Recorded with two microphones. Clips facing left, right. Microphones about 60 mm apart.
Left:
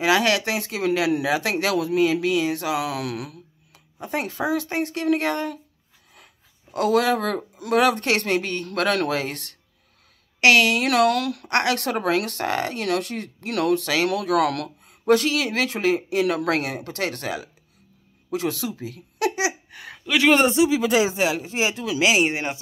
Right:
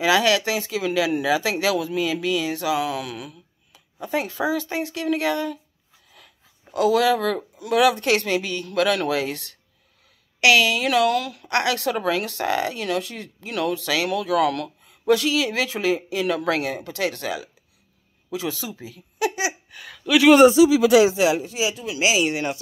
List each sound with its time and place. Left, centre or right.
0.0 s speech: left
2.8 s speech: left
4.0 s speech: left
6.1 s a sound: left
7.5 s speech: left
11.4 s speech: left
14.9 s speech: left
18.3 s speech: left
18.8 s a sound: left
20.1 s speech: centre
20.9 s speech: left
21.7 s speech: left
22.3 s speech: left